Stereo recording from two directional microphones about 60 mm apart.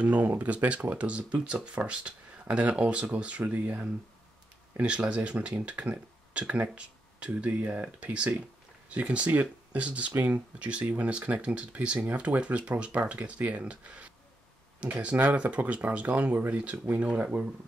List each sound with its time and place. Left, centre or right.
0.0 s speech: right